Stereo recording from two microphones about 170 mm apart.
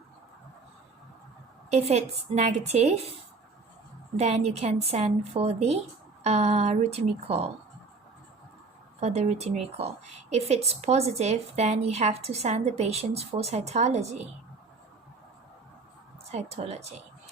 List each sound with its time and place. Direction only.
1.7 s a woman's voice: 40° right (ahead or behind)
4.2 s a woman's voice: 40° right (ahead or behind)
9.0 s a woman's voice: 40° right (ahead or behind)
16.3 s a woman's voice: 40° right (ahead or behind)